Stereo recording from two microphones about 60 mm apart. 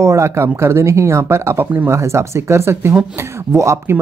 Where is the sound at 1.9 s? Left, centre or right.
Right.